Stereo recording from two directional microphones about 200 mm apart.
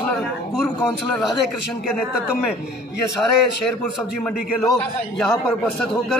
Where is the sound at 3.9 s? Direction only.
Centre (ahead or behind).